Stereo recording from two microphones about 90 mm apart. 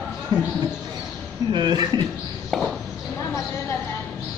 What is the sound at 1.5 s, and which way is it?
Speech, 55° right (ahead or behind).